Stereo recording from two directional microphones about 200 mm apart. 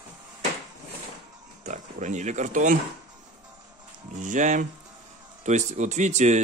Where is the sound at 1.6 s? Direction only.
35° right (ahead or behind).